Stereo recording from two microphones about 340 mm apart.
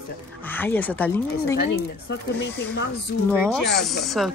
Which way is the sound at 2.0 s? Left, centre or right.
Left.